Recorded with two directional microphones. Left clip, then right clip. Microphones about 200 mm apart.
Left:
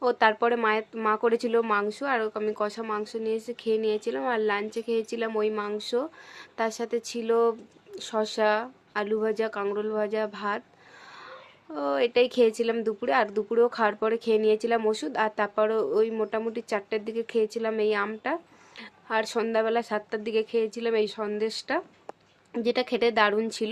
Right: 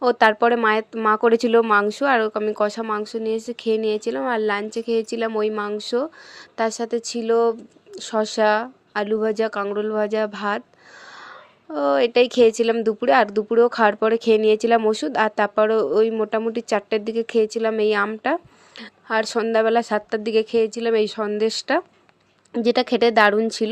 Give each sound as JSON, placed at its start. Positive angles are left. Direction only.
{"t": 0.0, "sound": "a woman's voice", "side_deg": -30}
{"t": 11.7, "sound": "a woman's voice", "side_deg": -30}